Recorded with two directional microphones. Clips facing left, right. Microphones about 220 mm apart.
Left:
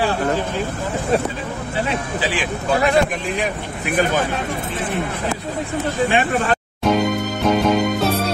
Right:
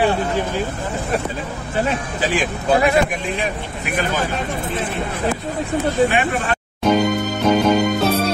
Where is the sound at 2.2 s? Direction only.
45° right (ahead or behind).